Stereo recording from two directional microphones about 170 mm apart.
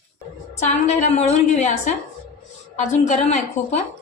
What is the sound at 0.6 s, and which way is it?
Speech, 40° left (ahead or behind).